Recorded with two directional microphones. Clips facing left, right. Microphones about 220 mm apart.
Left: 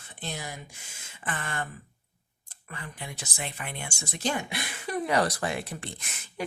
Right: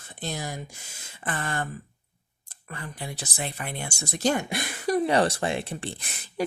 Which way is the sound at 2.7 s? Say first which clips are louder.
Right 4 dB; 40° right (ahead or behind).